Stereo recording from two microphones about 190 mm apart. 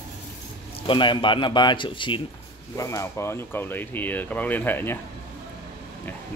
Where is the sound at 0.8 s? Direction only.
25° left (ahead or behind).